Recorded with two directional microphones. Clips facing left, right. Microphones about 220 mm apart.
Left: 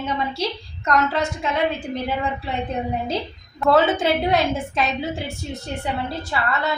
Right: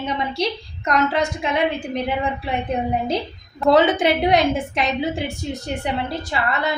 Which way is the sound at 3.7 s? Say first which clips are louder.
Right 2 dB; 15° right (ahead or behind).